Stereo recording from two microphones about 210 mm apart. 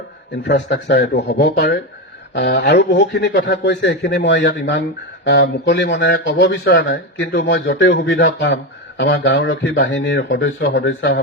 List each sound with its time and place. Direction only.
0.4 s a man's voice: 55° left (ahead or behind)